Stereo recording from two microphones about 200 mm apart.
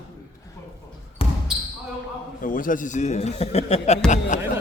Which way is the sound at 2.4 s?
45° left (ahead or behind).